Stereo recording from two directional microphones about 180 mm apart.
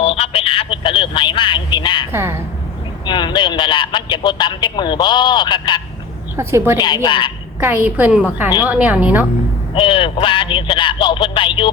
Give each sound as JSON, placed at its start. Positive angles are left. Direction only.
{"t": 0.0, "sound": "telephone", "side_deg": 30}
{"t": 2.1, "sound": "a woman's voice", "side_deg": -15}
{"t": 3.1, "sound": "a man's voice", "side_deg": 25}
{"t": 6.3, "sound": "a woman's voice", "side_deg": -15}
{"t": 6.7, "sound": "speech", "side_deg": 25}
{"t": 7.6, "sound": "a woman's voice", "side_deg": -10}
{"t": 9.7, "sound": "speech", "side_deg": 30}